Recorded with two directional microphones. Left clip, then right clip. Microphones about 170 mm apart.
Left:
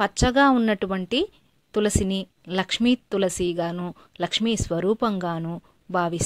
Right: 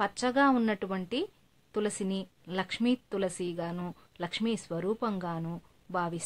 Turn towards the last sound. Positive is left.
turn(degrees=35)  # may be behind; listen again after turning